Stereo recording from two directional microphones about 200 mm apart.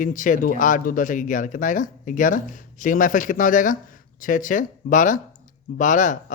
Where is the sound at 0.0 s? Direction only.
40° left (ahead or behind).